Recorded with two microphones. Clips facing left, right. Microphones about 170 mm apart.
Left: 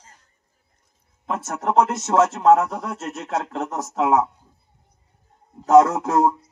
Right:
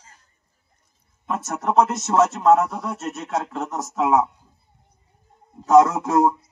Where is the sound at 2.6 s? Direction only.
90° left; by 3.8 s 55° left (ahead or behind).